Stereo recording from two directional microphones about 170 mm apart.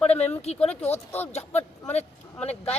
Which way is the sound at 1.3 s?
40° left (ahead or behind).